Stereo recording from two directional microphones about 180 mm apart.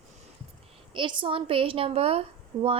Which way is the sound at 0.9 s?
25° right (ahead or behind).